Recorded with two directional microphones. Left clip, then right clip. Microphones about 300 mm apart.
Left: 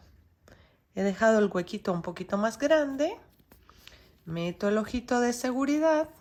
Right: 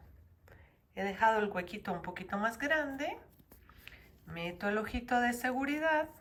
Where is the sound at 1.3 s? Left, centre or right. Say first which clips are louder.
Left 8 dB; centre.